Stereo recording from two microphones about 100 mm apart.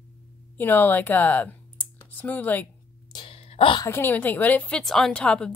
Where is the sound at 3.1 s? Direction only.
65° left (ahead or behind).